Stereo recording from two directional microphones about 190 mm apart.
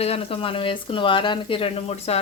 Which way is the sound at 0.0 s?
30° left (ahead or behind).